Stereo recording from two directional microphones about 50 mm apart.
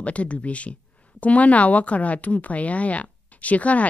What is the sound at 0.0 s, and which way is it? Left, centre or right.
A woman's voice, left.